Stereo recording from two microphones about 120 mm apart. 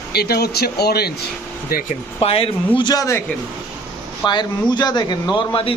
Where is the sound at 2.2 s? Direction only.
55° left (ahead or behind); by 3.2 s 25° left (ahead or behind).